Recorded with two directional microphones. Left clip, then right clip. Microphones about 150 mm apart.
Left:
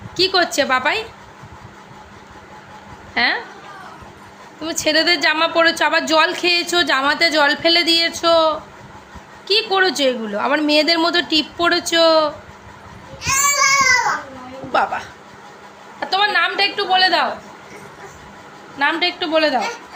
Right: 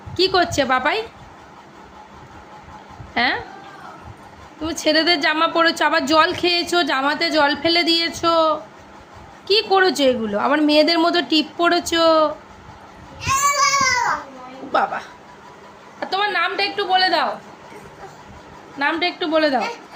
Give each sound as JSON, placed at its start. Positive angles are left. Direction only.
{"t": 0.2, "sound": "a woman's voice", "side_deg": -20}
{"t": 3.2, "sound": "a woman's voice", "side_deg": -25}
{"t": 4.6, "sound": "a woman's voice", "side_deg": -25}
{"t": 13.2, "sound": "a sound", "side_deg": 0}
{"t": 14.7, "sound": "a woman's voice", "side_deg": -20}
{"t": 18.8, "sound": "a woman's voice", "side_deg": -20}